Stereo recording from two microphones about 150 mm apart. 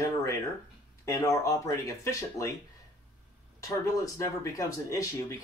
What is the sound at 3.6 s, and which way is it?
Speech, 20° left (ahead or behind).